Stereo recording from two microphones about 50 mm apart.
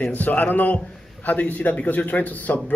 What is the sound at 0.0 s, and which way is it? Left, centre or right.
Speech, left.